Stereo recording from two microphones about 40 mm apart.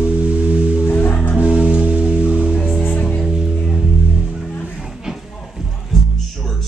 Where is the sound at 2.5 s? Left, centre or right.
Centre.